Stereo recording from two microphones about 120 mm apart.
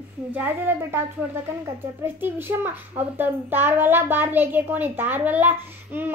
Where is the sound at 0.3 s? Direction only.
15° right (ahead or behind).